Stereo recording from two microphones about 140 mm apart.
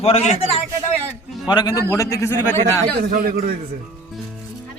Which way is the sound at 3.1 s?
90° right.